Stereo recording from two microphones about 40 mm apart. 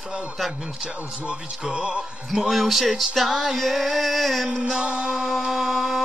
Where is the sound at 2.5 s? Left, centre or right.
Centre.